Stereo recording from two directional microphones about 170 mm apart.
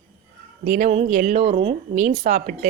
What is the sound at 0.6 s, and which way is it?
Speech, 55° right (ahead or behind).